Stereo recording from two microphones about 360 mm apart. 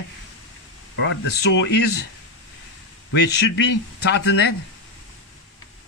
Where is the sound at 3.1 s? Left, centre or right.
Left.